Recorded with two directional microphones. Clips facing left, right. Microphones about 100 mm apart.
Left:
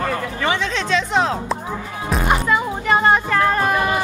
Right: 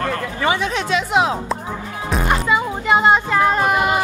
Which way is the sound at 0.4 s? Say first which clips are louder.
Right 3 dB; 15° right (ahead or behind).